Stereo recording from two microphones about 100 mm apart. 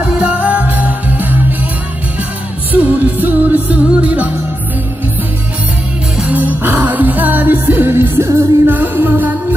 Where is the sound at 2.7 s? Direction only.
15° right (ahead or behind).